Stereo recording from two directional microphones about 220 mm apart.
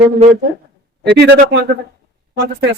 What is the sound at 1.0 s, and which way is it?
Speech, 50° right (ahead or behind).